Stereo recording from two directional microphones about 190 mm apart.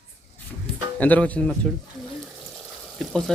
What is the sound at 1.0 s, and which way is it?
Speech, 10° left (ahead or behind).